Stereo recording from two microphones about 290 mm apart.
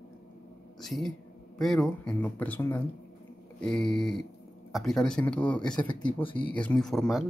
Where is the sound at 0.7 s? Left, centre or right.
Centre.